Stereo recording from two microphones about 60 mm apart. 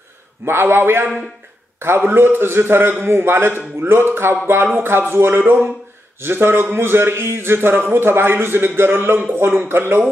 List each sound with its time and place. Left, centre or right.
0.5 s a man's voice: right